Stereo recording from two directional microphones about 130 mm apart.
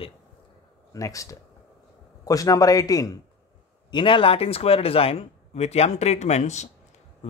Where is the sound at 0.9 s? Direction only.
25° left (ahead or behind).